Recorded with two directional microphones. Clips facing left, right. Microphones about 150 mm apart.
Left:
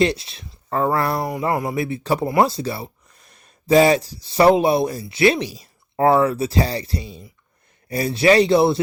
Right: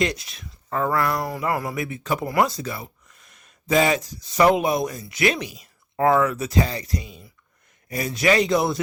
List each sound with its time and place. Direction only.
0.0 s speech: 30° left (ahead or behind)